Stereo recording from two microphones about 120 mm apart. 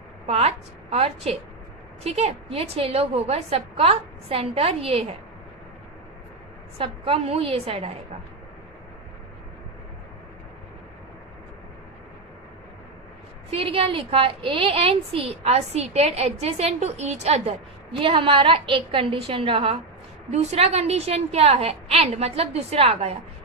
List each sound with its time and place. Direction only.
0.3 s a woman's voice: 60° right (ahead or behind)
6.8 s a woman's voice: 50° right (ahead or behind)
13.5 s a woman's voice: 50° right (ahead or behind)
20.2 s a woman's voice: 65° right (ahead or behind)